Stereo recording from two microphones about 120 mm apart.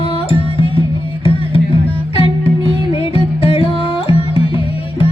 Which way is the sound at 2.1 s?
50° left (ahead or behind).